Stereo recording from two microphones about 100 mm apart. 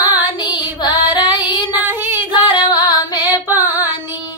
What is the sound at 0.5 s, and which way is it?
Child singing, 50° left (ahead or behind).